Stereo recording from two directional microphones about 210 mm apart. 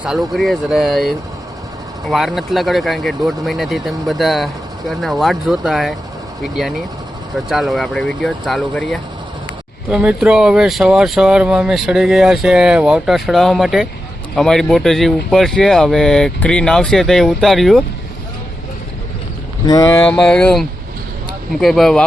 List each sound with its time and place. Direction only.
0.0 s speech: centre (ahead or behind)
19.6 s speech: 15° left (ahead or behind)
20.1 s speech: 5° left (ahead or behind)